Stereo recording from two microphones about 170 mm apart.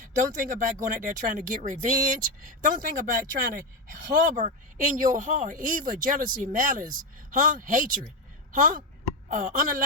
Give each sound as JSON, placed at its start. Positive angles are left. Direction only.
{"t": 0.0, "sound": "speech", "side_deg": -50}
{"t": 9.3, "sound": "speech", "side_deg": -50}